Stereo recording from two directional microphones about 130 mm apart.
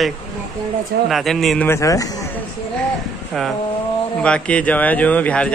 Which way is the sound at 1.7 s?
25° left (ahead or behind).